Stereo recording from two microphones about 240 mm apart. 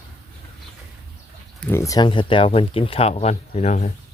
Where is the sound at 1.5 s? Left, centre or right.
Centre; by 3.9 s left.